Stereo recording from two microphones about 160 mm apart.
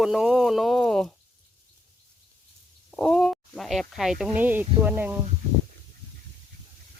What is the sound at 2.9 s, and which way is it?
Speech, 5° left (ahead or behind).